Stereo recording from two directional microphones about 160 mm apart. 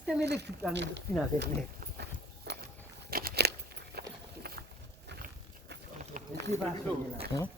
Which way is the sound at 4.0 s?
90° right.